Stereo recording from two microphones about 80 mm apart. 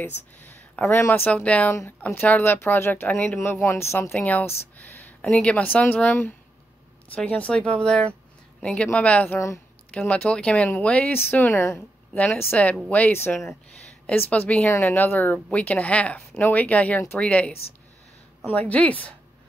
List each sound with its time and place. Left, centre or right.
0.0 s speech: left
1.7 s speech: left
4.1 s speech: left
5.2 s speech: centre
11.1 s speech: left
12.1 s speech: centre
18.5 s speech: centre